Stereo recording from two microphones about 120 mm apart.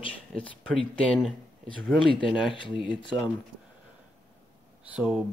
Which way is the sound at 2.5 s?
45° left (ahead or behind).